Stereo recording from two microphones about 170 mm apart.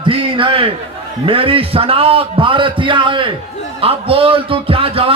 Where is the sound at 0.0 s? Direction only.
30° right (ahead or behind).